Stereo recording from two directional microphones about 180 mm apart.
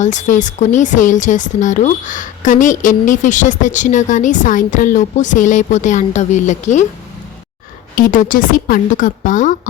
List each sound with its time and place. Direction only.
0.0 s speech: 45° left (ahead or behind)
7.9 s speech: 50° left (ahead or behind)